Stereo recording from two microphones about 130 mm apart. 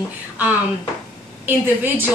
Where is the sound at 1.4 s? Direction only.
15° right (ahead or behind).